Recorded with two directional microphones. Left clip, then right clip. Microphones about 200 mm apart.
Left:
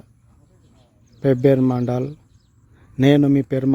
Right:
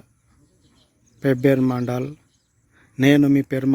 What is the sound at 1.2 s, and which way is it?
Speech, 5° left (ahead or behind).